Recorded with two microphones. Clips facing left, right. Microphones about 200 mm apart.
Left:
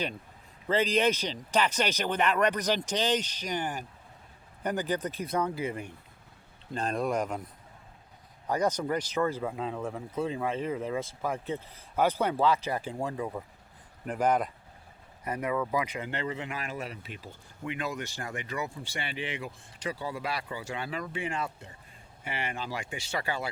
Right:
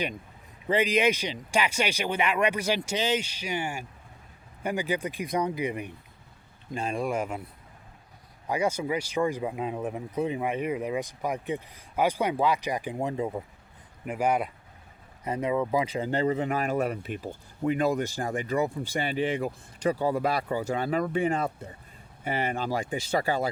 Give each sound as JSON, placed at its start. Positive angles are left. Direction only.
{"t": 0.7, "sound": "speech", "side_deg": -15}
{"t": 8.4, "sound": "speech", "side_deg": -10}
{"t": 14.0, "sound": "speech", "side_deg": -10}
{"t": 15.2, "sound": "speech", "side_deg": -20}